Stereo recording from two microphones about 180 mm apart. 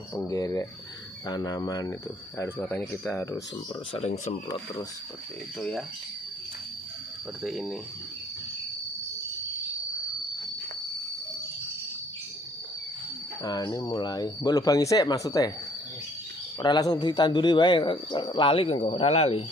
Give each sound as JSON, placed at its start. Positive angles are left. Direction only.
{"t": 0.1, "sound": "speech", "side_deg": 20}
{"t": 4.0, "sound": "speech", "side_deg": 35}
{"t": 5.6, "sound": "speech", "side_deg": 5}
{"t": 7.4, "sound": "speech", "side_deg": 0}
{"t": 13.4, "sound": "speech", "side_deg": 20}
{"t": 16.5, "sound": "speech", "side_deg": 20}